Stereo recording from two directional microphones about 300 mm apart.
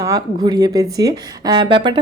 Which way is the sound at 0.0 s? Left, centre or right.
Centre.